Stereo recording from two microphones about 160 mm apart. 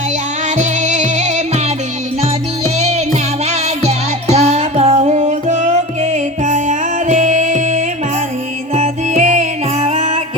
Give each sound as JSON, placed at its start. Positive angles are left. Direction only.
{"t": 0.5, "sound": "music", "side_deg": -50}
{"t": 2.7, "sound": "music", "side_deg": -40}